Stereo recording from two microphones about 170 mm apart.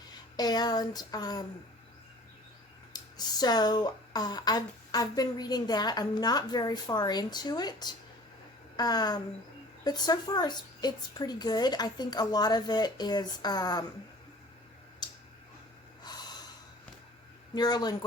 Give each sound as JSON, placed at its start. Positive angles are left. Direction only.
{"t": 0.1, "sound": "speech", "side_deg": 25}
{"t": 2.9, "sound": "speech", "side_deg": 25}
{"t": 16.0, "sound": "snort", "side_deg": 25}
{"t": 17.5, "sound": "speech", "side_deg": 25}